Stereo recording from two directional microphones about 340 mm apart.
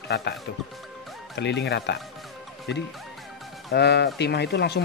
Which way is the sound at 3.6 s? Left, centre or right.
Left.